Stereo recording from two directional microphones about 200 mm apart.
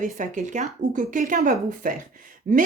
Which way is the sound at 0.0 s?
40° right (ahead or behind).